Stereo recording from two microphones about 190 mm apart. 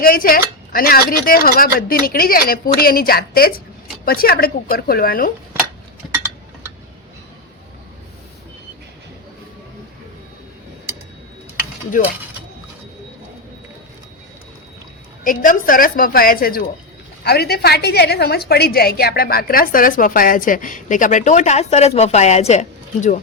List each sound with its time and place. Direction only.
0.0 s a woman's voice: 50° left (ahead or behind)
15.2 s a woman's voice: 45° left (ahead or behind)